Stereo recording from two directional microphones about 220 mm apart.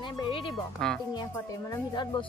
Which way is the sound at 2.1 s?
20° left (ahead or behind).